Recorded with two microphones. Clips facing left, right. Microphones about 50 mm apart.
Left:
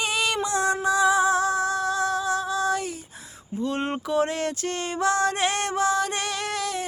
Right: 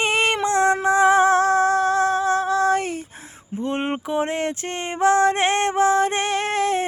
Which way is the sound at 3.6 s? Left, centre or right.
Right.